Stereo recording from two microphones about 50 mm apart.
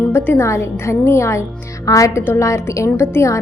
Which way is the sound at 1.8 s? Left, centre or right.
Left.